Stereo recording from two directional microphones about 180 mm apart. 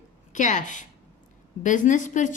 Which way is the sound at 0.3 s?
45° left (ahead or behind).